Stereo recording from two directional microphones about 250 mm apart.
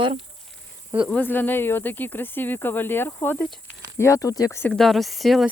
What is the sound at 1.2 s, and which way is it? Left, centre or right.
Speech, centre.